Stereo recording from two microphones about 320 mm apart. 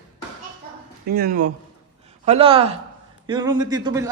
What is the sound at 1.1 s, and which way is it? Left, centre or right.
Speech, right.